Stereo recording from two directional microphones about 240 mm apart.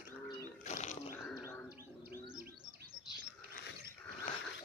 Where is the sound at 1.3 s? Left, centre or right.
Centre.